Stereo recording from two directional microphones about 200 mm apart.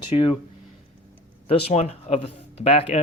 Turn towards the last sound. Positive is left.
turn(degrees=30)  # may be behind; listen again after turning